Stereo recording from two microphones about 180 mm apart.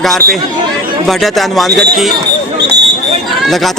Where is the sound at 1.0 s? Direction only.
Centre (ahead or behind).